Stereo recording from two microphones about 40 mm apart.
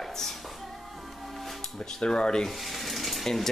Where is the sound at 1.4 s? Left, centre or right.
Centre.